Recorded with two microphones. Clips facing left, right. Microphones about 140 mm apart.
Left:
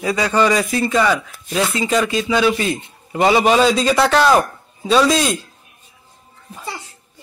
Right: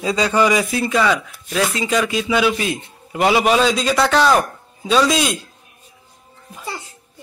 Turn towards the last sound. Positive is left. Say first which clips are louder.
# left 2 dB
turn(degrees=0)  # may be behind; listen again after turning